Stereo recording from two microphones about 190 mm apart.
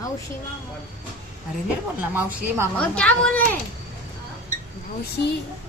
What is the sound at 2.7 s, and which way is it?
Speech, 5° left (ahead or behind).